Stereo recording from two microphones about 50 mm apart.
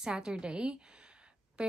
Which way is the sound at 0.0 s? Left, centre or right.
Centre.